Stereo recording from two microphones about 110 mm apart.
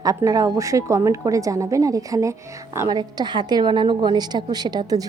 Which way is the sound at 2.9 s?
40° right (ahead or behind).